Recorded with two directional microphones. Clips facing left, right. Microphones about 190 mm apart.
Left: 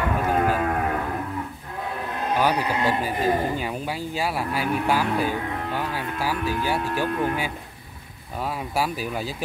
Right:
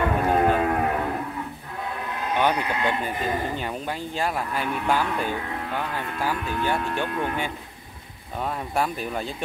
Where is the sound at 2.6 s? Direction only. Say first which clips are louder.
Left 2 dB; 35° left (ahead or behind).